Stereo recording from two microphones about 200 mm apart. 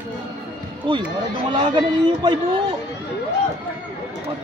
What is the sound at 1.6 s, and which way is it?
Speech, 25° right (ahead or behind).